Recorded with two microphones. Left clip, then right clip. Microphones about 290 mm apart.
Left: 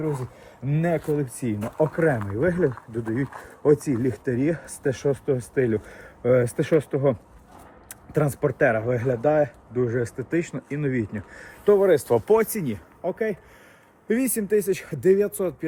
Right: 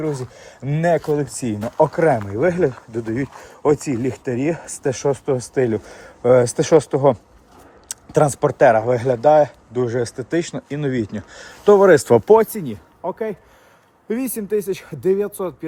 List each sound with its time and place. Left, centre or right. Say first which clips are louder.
0.0 s speech: right 4 dB; right
12.5 s speech: right 1 dB; centre